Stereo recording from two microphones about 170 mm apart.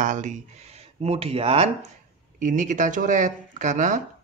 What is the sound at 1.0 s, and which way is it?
Speech, 35° right (ahead or behind).